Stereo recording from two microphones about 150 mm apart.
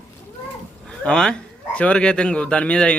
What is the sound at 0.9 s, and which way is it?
A man's voice, 5° left (ahead or behind).